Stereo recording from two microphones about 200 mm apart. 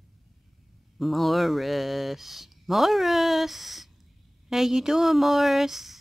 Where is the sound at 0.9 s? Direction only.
Centre (ahead or behind).